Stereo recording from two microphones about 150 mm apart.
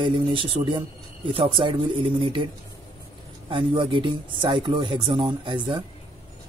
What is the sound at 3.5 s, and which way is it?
Speech, 35° right (ahead or behind).